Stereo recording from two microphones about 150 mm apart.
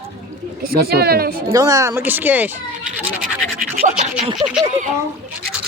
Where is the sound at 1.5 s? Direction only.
25° right (ahead or behind).